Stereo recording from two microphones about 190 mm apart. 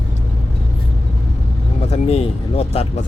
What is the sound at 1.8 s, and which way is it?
Speech, 35° left (ahead or behind).